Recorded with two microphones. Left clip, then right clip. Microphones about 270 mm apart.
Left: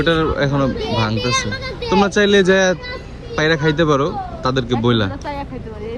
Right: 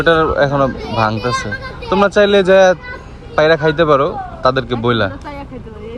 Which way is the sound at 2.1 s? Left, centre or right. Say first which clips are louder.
Right 5 dB; centre.